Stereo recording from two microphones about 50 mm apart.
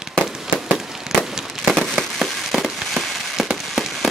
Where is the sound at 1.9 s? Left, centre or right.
Centre.